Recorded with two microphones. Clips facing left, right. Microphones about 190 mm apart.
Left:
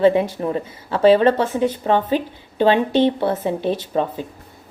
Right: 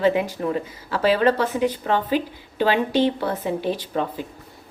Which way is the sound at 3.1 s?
25° left (ahead or behind).